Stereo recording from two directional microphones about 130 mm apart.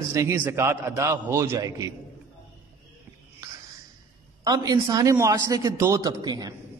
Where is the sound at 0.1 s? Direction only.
20° right (ahead or behind).